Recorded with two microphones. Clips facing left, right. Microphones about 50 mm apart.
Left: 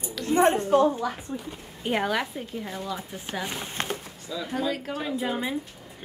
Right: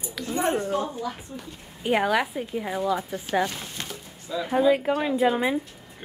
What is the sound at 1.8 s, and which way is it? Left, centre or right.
A woman's voice, centre.